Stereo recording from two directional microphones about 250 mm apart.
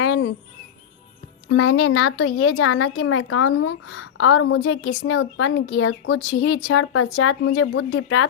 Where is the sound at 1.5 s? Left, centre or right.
Left.